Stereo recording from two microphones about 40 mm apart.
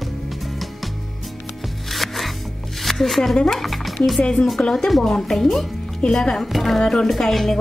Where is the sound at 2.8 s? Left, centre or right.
Centre.